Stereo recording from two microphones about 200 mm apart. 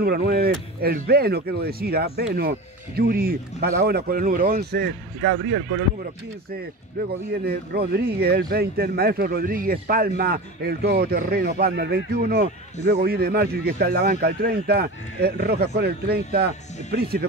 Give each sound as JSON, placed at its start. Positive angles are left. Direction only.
{"t": 0.0, "sound": "speech", "side_deg": -50}
{"t": 7.0, "sound": "speech", "side_deg": -50}